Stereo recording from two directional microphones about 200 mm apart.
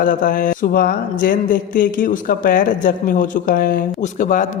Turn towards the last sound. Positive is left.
turn(degrees=40)  # may be behind; listen again after turning